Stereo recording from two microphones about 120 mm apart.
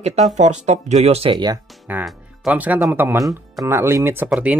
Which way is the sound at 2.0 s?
Centre (ahead or behind).